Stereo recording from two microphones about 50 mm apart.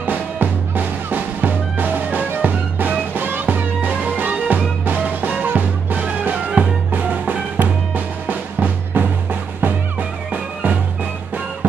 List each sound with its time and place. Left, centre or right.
0.0 s music: right